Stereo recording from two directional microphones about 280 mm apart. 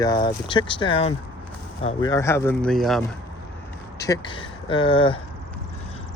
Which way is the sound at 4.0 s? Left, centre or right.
Centre.